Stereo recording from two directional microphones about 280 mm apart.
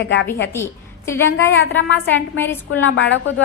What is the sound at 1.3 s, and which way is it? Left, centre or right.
Speech, left.